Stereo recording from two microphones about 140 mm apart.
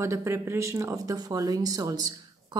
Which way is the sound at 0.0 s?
20° right (ahead or behind).